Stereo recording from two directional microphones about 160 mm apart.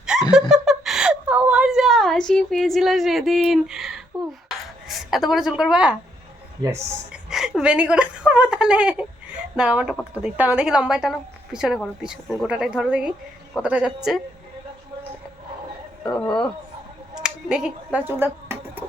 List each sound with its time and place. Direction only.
0.0 s a sound: 5° right (ahead or behind)
0.3 s whimper: centre (ahead or behind)
4.4 s a sound: centre (ahead or behind)
7.1 s speech: 5° right (ahead or behind)
16.0 s speech: 5° left (ahead or behind)
17.2 s finger snapping: 5° right (ahead or behind)